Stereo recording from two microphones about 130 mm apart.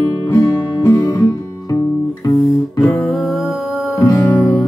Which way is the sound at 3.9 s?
25° left (ahead or behind).